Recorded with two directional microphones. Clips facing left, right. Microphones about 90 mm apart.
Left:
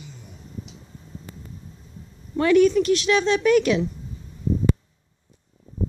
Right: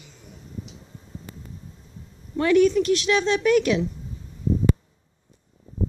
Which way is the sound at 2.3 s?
90° left.